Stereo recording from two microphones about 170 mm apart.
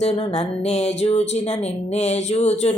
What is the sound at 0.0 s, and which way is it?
Speech, 35° left (ahead or behind).